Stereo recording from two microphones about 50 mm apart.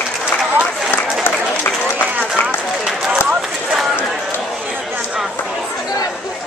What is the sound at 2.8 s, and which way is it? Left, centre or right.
Run, centre.